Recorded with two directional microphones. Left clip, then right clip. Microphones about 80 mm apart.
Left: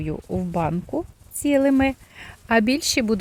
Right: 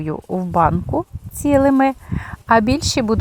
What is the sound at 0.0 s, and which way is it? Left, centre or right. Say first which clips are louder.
Speech: right 5 dB; centre.